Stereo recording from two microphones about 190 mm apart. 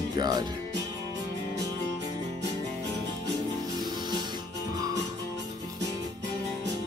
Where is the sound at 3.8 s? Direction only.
20° right (ahead or behind).